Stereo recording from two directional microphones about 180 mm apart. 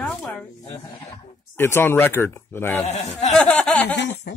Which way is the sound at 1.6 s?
15° left (ahead or behind).